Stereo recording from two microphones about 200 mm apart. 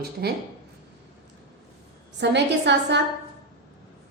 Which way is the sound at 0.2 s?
55° right (ahead or behind).